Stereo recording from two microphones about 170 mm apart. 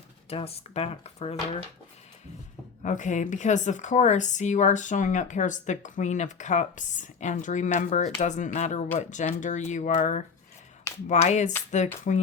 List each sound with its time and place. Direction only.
0.3 s speech: 35° left (ahead or behind)
2.8 s speech: 45° left (ahead or behind)